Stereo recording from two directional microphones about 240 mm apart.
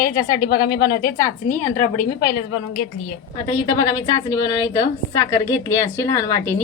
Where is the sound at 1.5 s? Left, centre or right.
Left.